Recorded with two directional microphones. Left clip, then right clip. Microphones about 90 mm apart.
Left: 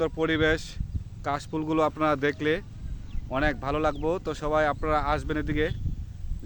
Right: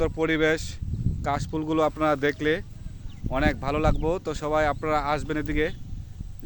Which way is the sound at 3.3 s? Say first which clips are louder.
Right 1 dB; 55° right (ahead or behind).